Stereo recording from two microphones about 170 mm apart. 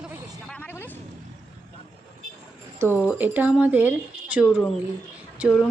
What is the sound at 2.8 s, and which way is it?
A woman's voice, 10° right (ahead or behind).